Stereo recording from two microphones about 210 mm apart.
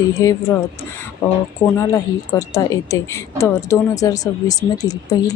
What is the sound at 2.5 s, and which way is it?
Speech, 15° left (ahead or behind).